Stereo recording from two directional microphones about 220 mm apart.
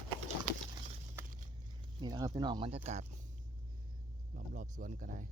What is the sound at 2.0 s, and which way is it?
Speech, 20° right (ahead or behind).